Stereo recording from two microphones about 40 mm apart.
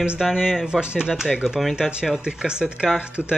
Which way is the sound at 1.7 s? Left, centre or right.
Centre.